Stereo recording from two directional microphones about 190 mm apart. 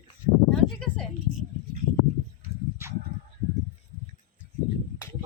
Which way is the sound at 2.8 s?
10° right (ahead or behind).